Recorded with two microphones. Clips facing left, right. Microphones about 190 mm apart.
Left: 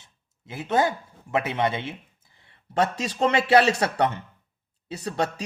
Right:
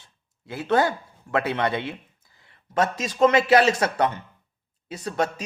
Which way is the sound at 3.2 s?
30° left (ahead or behind).